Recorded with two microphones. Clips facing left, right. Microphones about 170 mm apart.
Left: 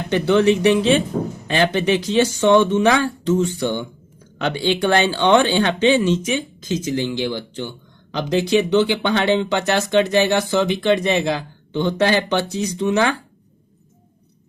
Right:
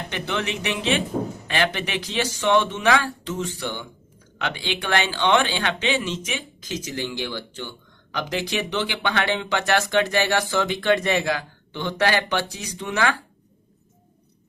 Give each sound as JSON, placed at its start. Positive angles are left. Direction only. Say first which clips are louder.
{"t": 0.1, "sound": "speech", "louder": "left 14 dB", "side_deg": 35}
{"t": 6.9, "sound": "speech", "louder": "left 5 dB", "side_deg": 20}